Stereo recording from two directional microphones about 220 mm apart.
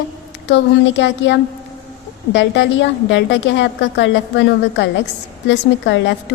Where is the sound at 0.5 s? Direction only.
55° left (ahead or behind).